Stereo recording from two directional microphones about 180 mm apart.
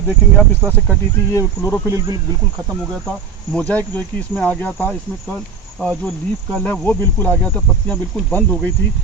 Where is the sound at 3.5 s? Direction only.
5° left (ahead or behind).